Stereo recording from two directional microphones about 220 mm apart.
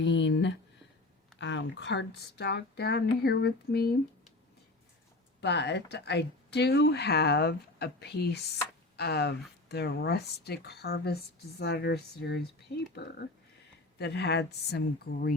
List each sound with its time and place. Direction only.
0.0 s a sound: 55° left (ahead or behind)
1.4 s speech: 55° left (ahead or behind)
5.4 s speech: 50° left (ahead or behind)